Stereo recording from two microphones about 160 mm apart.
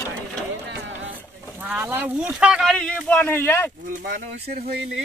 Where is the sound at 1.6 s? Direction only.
10° right (ahead or behind); by 3.7 s 15° left (ahead or behind).